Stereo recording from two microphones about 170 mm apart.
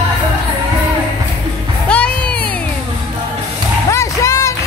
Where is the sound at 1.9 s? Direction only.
5° left (ahead or behind).